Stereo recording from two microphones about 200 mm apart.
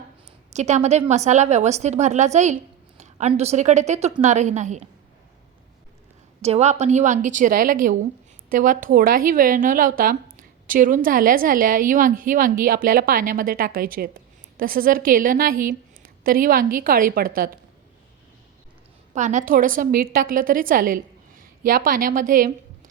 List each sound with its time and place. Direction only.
0.5 s a woman's voice: 35° right (ahead or behind)
6.4 s a woman's voice: 30° right (ahead or behind)
19.1 s a woman's voice: 40° right (ahead or behind)